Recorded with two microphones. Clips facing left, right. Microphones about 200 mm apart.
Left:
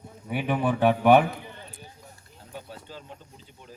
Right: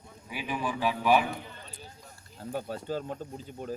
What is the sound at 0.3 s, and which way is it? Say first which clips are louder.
Speech: left 7 dB; 60° left (ahead or behind).